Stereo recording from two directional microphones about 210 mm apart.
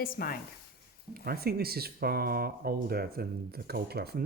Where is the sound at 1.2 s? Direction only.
45° right (ahead or behind).